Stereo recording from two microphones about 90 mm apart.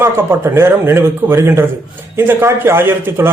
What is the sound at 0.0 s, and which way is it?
A man's voice, 25° right (ahead or behind).